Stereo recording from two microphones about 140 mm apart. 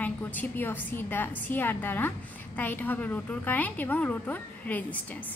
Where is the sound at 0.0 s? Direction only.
10° left (ahead or behind).